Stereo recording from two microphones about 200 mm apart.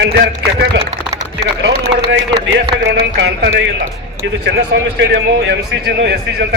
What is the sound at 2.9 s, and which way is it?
A man's voice, 55° right (ahead or behind).